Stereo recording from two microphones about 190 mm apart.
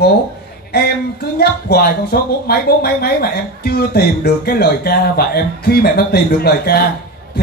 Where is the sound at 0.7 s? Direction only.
55° left (ahead or behind).